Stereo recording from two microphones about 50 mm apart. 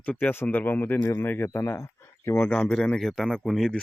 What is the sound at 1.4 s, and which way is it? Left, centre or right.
Speech, left.